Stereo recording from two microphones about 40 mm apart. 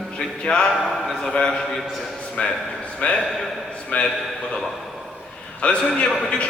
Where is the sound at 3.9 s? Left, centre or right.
Left.